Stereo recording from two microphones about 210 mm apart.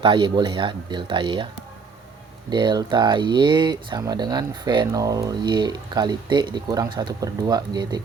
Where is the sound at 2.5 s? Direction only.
20° right (ahead or behind).